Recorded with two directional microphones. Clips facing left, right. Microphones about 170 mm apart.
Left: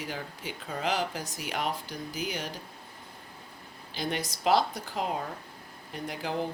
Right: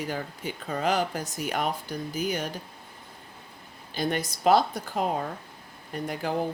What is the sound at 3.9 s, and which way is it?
Speech, 50° right (ahead or behind).